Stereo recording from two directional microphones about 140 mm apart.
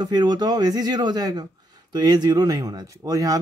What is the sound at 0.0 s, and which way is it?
Speech, 30° right (ahead or behind).